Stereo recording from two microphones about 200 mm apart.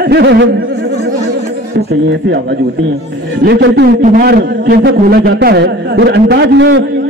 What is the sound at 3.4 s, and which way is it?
A man's voice, 55° right (ahead or behind).